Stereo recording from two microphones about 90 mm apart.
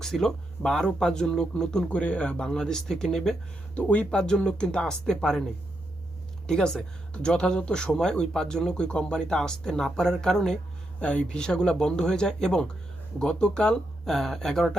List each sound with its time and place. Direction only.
0.0 s speech: 5° left (ahead or behind)
6.5 s speech: 5° left (ahead or behind)